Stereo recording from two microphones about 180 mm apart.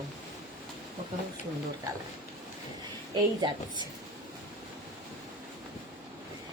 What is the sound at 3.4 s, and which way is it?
Speech, 25° right (ahead or behind).